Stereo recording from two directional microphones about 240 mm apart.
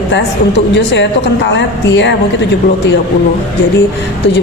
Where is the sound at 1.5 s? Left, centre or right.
Left.